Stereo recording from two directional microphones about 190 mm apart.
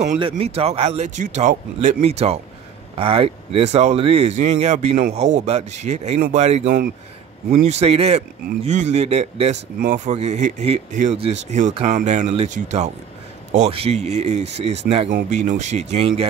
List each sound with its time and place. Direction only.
0.2 s speech: 30° right (ahead or behind)